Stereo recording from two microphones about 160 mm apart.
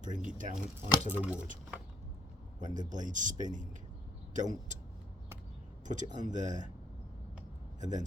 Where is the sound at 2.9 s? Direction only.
55° right (ahead or behind).